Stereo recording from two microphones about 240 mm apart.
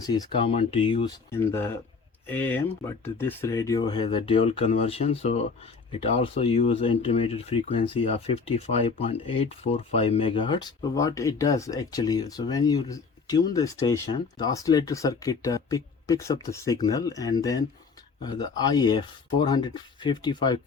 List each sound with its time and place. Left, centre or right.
0.0 s speech: centre